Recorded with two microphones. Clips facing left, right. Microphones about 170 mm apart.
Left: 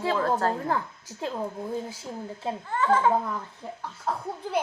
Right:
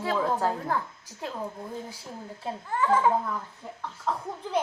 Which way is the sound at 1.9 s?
20° left (ahead or behind).